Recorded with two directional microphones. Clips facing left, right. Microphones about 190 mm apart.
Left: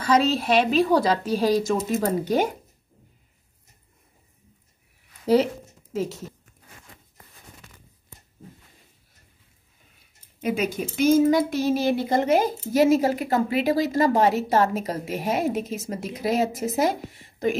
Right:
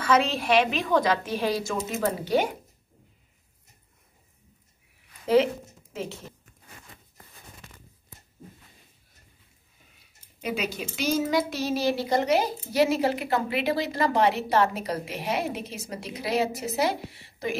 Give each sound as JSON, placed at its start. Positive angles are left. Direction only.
{"t": 0.0, "sound": "a woman's voice", "side_deg": 35}
{"t": 5.2, "sound": "speech", "side_deg": 40}
{"t": 10.4, "sound": "speech", "side_deg": 50}